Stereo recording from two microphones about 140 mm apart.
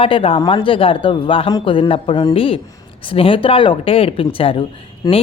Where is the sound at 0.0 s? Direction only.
40° left (ahead or behind).